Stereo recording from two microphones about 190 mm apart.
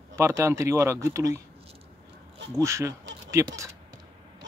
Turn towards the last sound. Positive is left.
turn(degrees=-15)  # may be behind; listen again after turning